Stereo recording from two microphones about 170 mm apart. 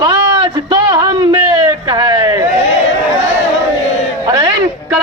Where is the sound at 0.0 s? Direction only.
30° right (ahead or behind).